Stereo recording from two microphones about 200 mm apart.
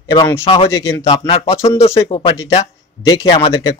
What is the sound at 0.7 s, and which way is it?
Speech, 15° left (ahead or behind).